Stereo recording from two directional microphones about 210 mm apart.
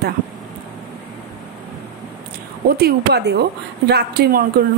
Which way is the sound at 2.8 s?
50° right (ahead or behind).